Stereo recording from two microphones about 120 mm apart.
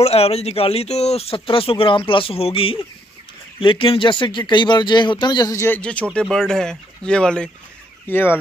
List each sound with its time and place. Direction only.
0.0 s speech: 55° left (ahead or behind); by 5.6 s 35° left (ahead or behind)
5.6 s speech: 15° left (ahead or behind)
8.1 s speech: 20° left (ahead or behind)